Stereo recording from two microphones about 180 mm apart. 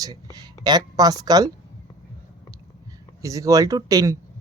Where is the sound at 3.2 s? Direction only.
20° right (ahead or behind).